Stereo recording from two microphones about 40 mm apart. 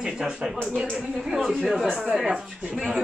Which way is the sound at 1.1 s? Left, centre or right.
Centre.